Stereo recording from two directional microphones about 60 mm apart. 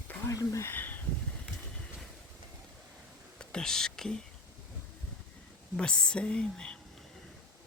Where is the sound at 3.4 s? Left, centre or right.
Centre.